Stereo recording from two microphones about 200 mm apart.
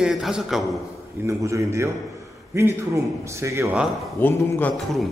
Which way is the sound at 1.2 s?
15° right (ahead or behind).